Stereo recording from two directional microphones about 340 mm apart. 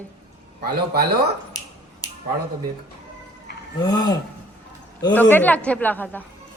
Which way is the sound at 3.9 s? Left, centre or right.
Centre.